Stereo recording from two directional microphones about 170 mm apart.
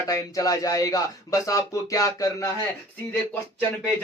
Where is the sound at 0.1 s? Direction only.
20° left (ahead or behind).